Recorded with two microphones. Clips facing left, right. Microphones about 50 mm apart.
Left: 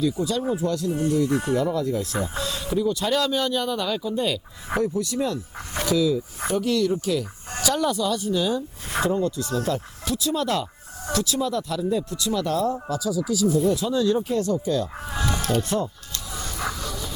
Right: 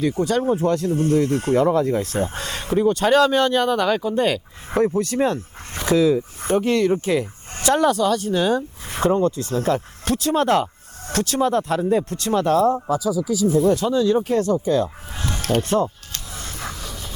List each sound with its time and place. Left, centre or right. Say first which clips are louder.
0.0 s speech: right 4 dB; right
13.1 s speech: right 3 dB; left
13.4 s speech: right 4 dB; right
15.4 s music: right 7 dB; right
16.7 s dog: left 2 dB; centre